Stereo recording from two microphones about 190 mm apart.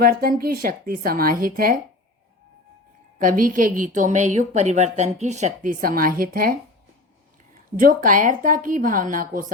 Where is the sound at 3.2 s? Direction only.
45° right (ahead or behind).